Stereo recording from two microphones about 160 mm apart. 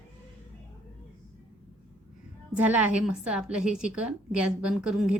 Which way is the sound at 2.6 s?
10° right (ahead or behind).